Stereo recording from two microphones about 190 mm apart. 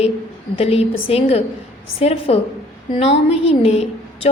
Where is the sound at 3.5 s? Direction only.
30° left (ahead or behind).